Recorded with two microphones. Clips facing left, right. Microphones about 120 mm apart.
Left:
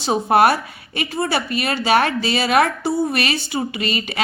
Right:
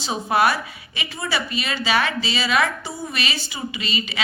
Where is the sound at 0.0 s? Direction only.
50° left (ahead or behind).